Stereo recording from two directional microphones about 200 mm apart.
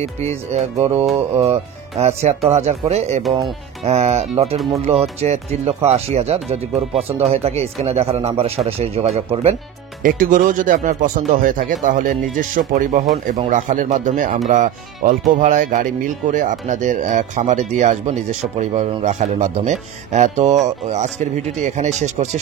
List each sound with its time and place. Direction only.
0.5 s a man's voice: 30° right (ahead or behind)
10.0 s speech: 40° right (ahead or behind)